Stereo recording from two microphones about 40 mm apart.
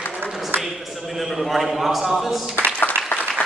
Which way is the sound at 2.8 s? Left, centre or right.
Left.